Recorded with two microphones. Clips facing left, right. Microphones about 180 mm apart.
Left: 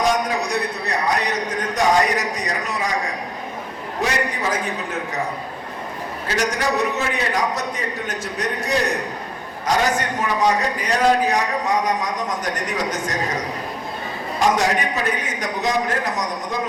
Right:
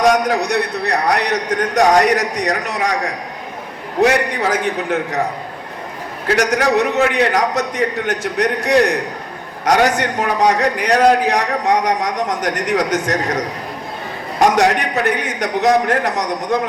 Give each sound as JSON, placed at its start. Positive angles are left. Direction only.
{"t": 0.0, "sound": "a man's voice", "side_deg": -70}
{"t": 4.0, "sound": "a man's voice", "side_deg": -70}
{"t": 6.2, "sound": "a man's voice", "side_deg": -70}